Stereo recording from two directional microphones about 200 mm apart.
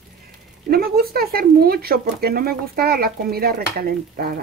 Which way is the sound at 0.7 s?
50° right (ahead or behind).